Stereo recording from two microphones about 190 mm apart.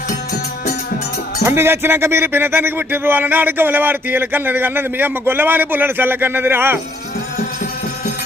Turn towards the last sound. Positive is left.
turn(degrees=-10)  # may be behind; listen again after turning